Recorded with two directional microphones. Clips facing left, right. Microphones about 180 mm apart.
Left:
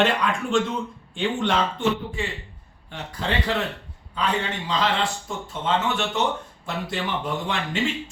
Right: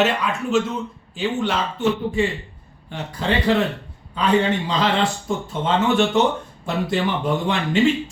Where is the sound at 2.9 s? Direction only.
10° right (ahead or behind).